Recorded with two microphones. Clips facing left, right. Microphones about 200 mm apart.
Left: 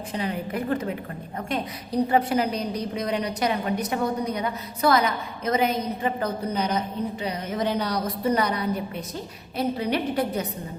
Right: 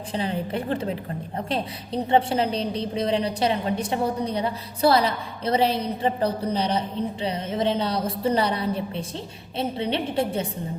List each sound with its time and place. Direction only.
0.1 s a woman's voice: 30° right (ahead or behind)